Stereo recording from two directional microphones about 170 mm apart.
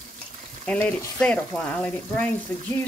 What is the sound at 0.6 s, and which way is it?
Speech, 10° left (ahead or behind).